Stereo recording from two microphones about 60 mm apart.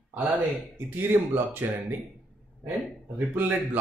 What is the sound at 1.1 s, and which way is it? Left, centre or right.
Speech, right.